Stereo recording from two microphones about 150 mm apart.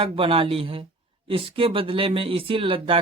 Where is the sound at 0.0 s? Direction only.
35° right (ahead or behind).